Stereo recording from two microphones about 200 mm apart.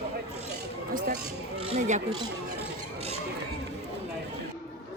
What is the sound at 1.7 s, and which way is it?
Speech, 35° right (ahead or behind).